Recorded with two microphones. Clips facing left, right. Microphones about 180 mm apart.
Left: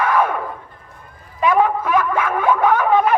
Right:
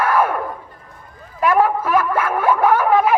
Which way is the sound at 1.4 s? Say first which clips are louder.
Even; 5° right (ahead or behind).